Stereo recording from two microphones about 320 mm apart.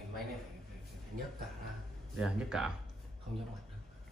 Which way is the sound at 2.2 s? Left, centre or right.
Centre.